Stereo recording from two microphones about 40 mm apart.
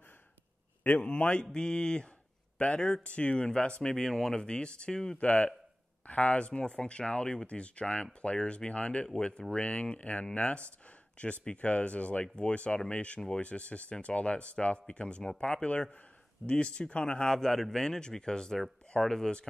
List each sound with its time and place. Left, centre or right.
0.9 s speech: left
1.4 s speech: centre
3.9 s speech: centre
4.5 s speech: left
9.5 s speech: left
17.4 s speech: centre